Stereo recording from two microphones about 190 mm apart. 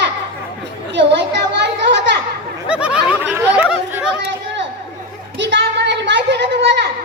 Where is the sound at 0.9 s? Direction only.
65° right (ahead or behind).